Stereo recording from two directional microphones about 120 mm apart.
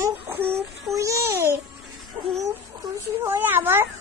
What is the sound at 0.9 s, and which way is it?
Babbling, 25° right (ahead or behind).